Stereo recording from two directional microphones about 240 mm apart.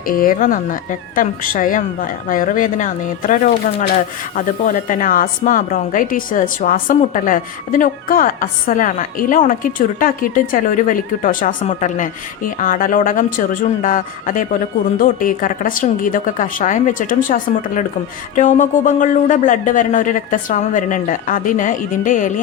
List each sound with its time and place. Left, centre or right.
0.0 s speech: left